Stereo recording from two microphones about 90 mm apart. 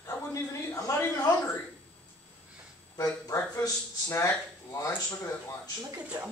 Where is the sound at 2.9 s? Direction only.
40° left (ahead or behind).